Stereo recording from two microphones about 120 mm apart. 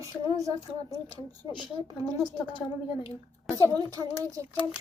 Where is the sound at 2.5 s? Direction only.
45° left (ahead or behind).